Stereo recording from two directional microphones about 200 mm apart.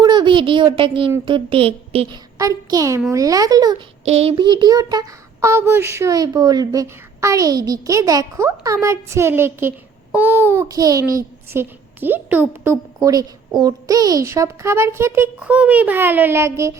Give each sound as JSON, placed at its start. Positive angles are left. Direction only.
{"t": 0.0, "sound": "a child's voice", "side_deg": -20}
{"t": 2.4, "sound": "child singing", "side_deg": -15}
{"t": 4.0, "sound": "child singing", "side_deg": -30}